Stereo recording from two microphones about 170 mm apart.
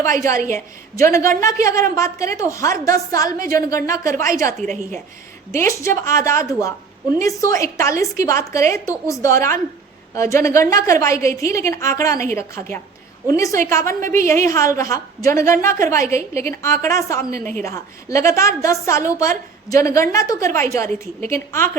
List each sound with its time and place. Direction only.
0.0 s a woman's voice: 15° left (ahead or behind)
5.5 s a woman's voice: 15° left (ahead or behind)